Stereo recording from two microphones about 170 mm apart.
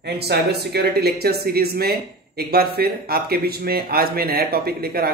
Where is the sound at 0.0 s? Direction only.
70° right (ahead or behind).